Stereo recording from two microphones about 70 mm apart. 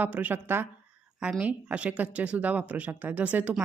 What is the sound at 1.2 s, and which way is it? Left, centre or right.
A woman's voice, centre.